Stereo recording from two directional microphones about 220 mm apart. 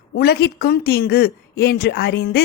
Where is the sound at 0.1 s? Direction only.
50° left (ahead or behind).